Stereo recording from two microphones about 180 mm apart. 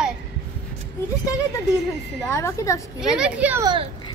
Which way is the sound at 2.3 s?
15° left (ahead or behind).